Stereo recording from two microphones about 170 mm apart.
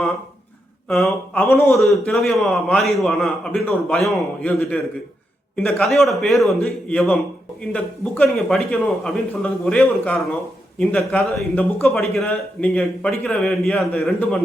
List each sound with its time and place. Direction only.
0.9 s a man's voice: centre (ahead or behind)
1.4 s a man's voice: 15° left (ahead or behind)
2.0 s a man's voice: centre (ahead or behind)